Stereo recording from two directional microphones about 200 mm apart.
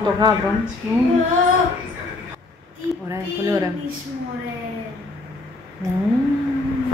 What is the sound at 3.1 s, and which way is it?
Speech, 15° right (ahead or behind).